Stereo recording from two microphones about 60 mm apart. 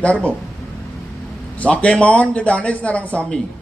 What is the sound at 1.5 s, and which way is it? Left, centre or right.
A man's voice, left.